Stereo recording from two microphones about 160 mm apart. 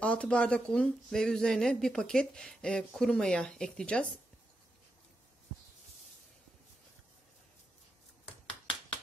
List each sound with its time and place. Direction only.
0.0 s speech: 5° left (ahead or behind)
8.5 s finger snapping: 35° left (ahead or behind)